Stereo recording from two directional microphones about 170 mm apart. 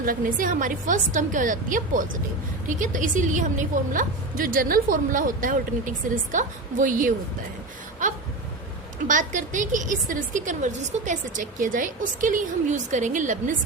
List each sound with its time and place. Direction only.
0.0 s a woman's voice: 55° right (ahead or behind)
8.0 s a sound: 45° right (ahead or behind)
9.0 s a woman's voice: 50° right (ahead or behind)